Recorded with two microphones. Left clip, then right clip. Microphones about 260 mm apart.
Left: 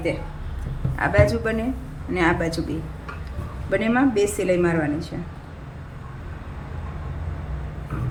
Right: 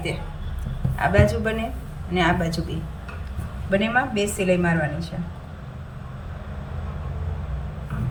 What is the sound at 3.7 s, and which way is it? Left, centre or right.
Speech, left.